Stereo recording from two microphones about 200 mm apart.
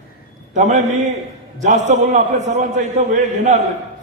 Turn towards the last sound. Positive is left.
turn(degrees=-35)  # may be behind; listen again after turning